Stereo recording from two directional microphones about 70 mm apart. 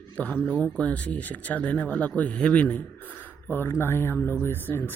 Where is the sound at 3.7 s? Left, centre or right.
Left.